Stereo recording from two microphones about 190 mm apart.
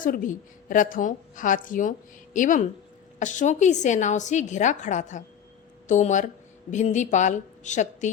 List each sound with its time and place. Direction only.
0.0 s a woman's voice: 45° left (ahead or behind)